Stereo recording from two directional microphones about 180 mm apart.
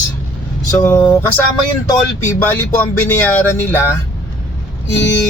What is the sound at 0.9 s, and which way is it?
Speech, 10° left (ahead or behind).